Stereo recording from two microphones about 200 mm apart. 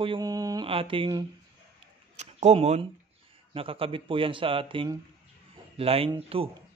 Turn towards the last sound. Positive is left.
turn(degrees=-30)  # may be behind; listen again after turning